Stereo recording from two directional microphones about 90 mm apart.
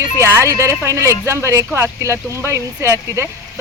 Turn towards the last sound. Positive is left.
turn(degrees=-30)  # may be behind; listen again after turning